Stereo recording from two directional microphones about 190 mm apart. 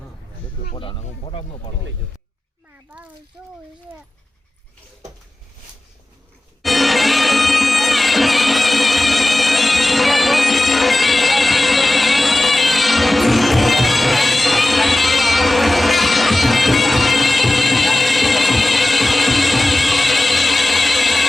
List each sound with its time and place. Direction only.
0.7 s speech: 25° left (ahead or behind)
6.6 s music: centre (ahead or behind)